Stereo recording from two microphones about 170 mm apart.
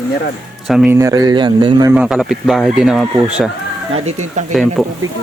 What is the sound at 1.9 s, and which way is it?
Speech, 5° right (ahead or behind).